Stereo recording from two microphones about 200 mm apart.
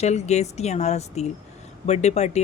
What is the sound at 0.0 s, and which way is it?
Speech, 35° left (ahead or behind).